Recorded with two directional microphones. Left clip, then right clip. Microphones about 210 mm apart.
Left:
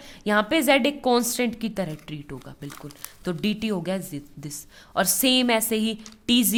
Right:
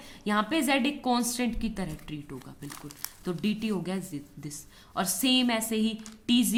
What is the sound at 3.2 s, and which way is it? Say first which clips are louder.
Speech: left 5 dB; 45° left (ahead or behind).